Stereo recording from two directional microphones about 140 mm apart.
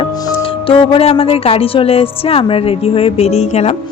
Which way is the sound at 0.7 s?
45° left (ahead or behind).